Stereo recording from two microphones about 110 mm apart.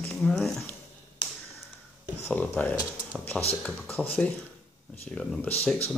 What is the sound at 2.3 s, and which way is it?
Speech, 15° left (ahead or behind).